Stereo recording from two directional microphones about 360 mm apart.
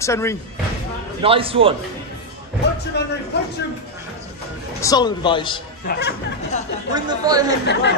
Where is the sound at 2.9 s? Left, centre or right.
Left.